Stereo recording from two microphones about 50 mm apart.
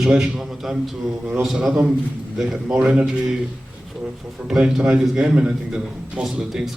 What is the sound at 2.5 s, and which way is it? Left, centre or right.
Speech, centre.